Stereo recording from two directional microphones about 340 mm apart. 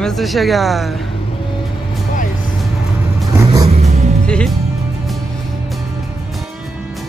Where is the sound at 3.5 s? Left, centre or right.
Centre.